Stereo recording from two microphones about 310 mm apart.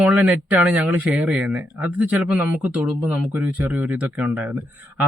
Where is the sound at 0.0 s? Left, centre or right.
Centre.